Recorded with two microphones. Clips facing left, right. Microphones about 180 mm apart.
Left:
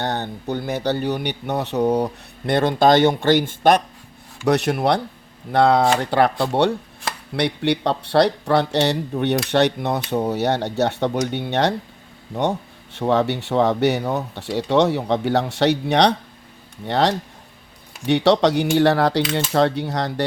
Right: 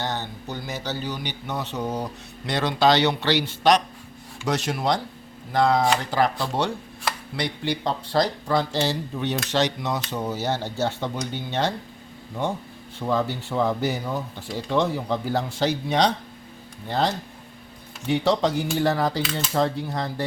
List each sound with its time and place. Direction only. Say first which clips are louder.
0.0 s speech: left 5 dB; 60° left (ahead or behind)
2.5 s a man's voice: left 5 dB; 50° left (ahead or behind); by 20.2 s 75° left (ahead or behind)